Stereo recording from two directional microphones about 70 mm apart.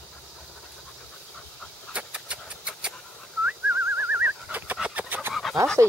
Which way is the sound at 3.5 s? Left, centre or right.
Right.